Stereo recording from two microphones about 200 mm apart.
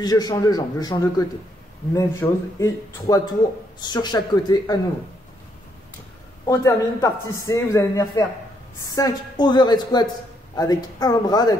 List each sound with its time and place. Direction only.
0.0 s a man's voice: 20° left (ahead or behind)
6.4 s a man's voice: 15° left (ahead or behind)